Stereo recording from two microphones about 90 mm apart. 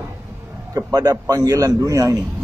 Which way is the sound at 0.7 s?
45° right (ahead or behind).